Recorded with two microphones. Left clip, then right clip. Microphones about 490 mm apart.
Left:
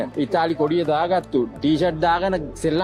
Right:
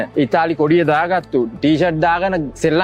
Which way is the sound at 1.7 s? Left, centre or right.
Right.